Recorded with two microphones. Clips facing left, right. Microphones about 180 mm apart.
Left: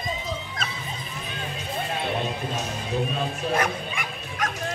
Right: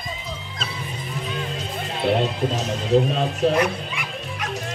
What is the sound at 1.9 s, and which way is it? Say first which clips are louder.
Music: right 10 dB; 70° right (ahead or behind).